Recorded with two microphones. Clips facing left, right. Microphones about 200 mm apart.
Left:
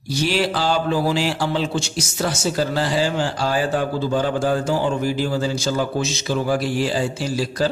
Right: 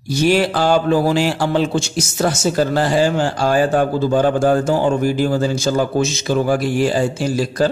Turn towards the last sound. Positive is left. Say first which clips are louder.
# right 4 dB
turn(degrees=-50)  # may be behind; listen again after turning